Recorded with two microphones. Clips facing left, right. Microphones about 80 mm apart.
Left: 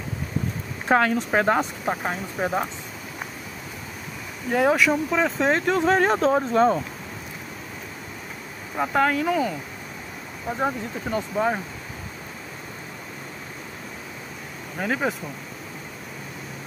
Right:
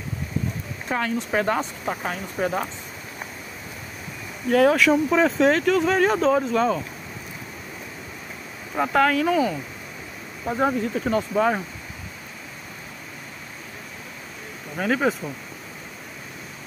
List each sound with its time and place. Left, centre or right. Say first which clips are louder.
0.8 s speech: left 6 dB; left
4.5 s speech: right 3 dB; centre
5.5 s speech: right 1 dB; left
8.9 s speech: right 2 dB; centre
10.5 s speech: right 4 dB; centre
11.1 s speech: right 2 dB; centre
14.8 s speech: right 3 dB; centre